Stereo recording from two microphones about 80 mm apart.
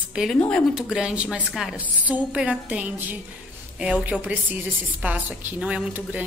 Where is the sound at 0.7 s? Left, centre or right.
Centre.